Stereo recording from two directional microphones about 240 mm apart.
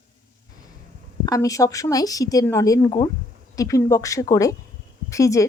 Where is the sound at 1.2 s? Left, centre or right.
Centre.